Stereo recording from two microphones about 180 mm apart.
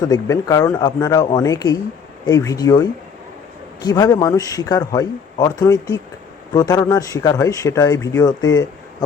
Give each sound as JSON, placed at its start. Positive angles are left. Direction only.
{"t": 0.0, "sound": "speech", "side_deg": 20}